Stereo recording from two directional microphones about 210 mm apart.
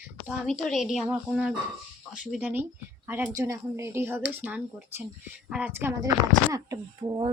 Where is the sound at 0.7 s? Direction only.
Centre (ahead or behind).